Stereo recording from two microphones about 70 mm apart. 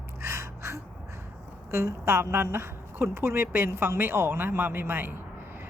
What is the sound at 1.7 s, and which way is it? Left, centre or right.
A woman's voice, right.